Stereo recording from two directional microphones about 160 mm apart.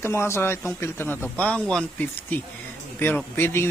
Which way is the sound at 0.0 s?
15° left (ahead or behind).